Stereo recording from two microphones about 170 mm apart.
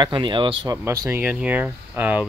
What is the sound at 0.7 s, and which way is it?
Speech, 15° right (ahead or behind).